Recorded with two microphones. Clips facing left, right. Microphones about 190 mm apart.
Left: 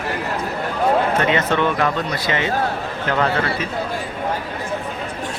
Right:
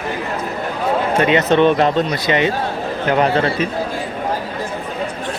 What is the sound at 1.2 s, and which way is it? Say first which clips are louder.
Speech: right 5 dB; 20° right (ahead or behind).